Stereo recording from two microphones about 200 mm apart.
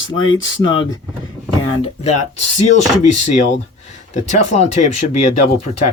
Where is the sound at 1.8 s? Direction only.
30° left (ahead or behind).